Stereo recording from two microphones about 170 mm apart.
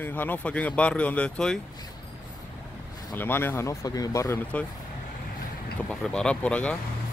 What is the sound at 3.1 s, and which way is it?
Speech, 10° left (ahead or behind).